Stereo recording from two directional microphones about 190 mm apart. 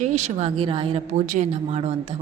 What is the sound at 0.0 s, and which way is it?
Speech, 35° right (ahead or behind).